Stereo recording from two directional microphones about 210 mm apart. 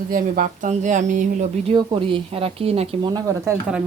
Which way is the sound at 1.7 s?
25° right (ahead or behind).